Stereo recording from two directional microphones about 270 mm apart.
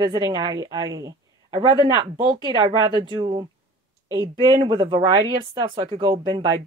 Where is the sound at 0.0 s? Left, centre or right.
Centre.